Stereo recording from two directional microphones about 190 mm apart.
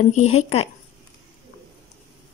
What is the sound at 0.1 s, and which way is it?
Speech, 35° left (ahead or behind).